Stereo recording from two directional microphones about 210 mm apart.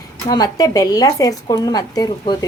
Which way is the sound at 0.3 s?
15° left (ahead or behind).